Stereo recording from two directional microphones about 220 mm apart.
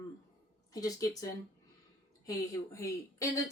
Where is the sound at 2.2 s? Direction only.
15° left (ahead or behind).